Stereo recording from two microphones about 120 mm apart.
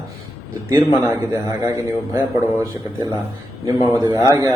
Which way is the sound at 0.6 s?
25° right (ahead or behind).